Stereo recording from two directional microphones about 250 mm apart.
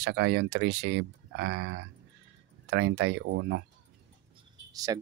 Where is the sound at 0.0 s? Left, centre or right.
Right.